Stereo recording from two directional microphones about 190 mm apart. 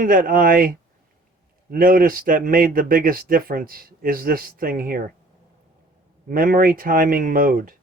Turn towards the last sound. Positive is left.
turn(degrees=-45)  # may be behind; listen again after turning